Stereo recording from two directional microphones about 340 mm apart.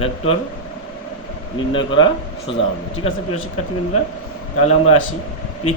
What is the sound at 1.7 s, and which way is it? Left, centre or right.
Speech, centre.